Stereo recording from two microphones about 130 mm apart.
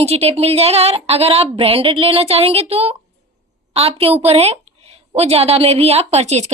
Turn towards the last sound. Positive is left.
turn(degrees=-60)  # may be behind; listen again after turning